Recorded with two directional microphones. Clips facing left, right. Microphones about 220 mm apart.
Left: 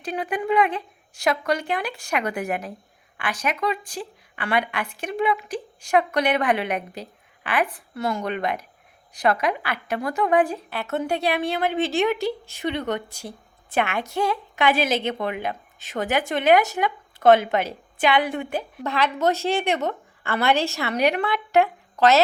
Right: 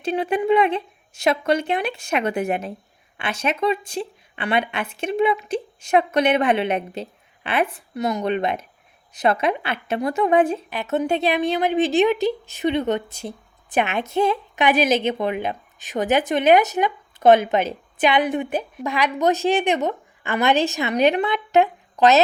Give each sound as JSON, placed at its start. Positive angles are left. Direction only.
{"t": 0.0, "sound": "speech", "side_deg": -25}